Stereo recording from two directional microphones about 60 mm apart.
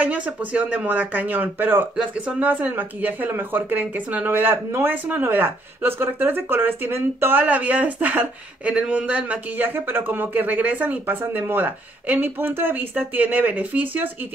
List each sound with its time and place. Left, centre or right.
0.0 s speech: right
9.7 s speech: right